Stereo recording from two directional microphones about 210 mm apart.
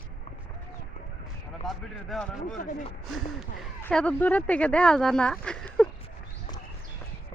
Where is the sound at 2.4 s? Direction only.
40° left (ahead or behind).